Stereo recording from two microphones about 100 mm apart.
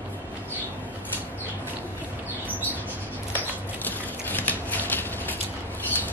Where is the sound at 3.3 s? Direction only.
20° left (ahead or behind).